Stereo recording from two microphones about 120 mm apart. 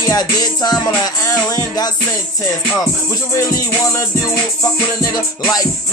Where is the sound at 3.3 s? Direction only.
25° left (ahead or behind).